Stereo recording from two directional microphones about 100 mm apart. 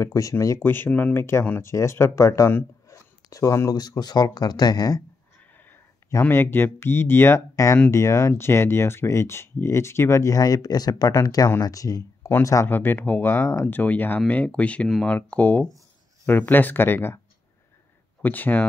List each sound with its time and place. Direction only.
0.0 s speech: 35° left (ahead or behind)
0.7 s speech: 20° left (ahead or behind); by 5.0 s 40° left (ahead or behind)
6.2 s speech: 20° left (ahead or behind)
12.6 s speech: 20° left (ahead or behind)
18.2 s speech: 15° left (ahead or behind)